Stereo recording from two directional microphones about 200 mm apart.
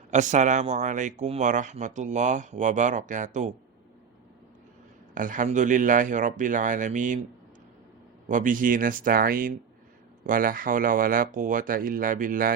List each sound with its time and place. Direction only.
0.1 s speech: 35° right (ahead or behind)
5.1 s speech: 40° right (ahead or behind)
8.3 s speech: 40° right (ahead or behind)